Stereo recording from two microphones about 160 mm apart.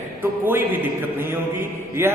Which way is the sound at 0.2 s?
10° right (ahead or behind).